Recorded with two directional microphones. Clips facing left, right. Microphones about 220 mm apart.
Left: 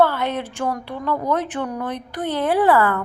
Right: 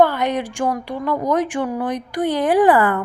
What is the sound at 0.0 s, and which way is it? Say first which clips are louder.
Speech: right 2 dB; 15° right (ahead or behind).